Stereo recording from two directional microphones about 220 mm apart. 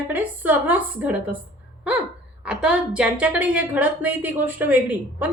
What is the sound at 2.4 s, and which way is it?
A woman's voice, 5° right (ahead or behind).